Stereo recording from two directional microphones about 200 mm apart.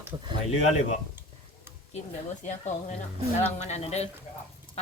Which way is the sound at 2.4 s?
35° left (ahead or behind).